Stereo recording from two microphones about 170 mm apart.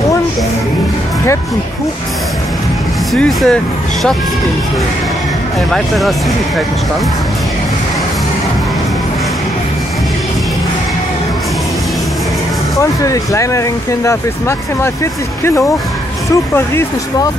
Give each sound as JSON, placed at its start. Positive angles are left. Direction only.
{"t": 3.2, "sound": "speech", "side_deg": 5}
{"t": 5.7, "sound": "speech", "side_deg": 0}
{"t": 13.0, "sound": "speech", "side_deg": 20}
{"t": 15.4, "sound": "speech", "side_deg": 15}